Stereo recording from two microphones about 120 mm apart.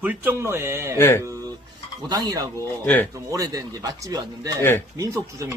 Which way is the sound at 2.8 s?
15° left (ahead or behind).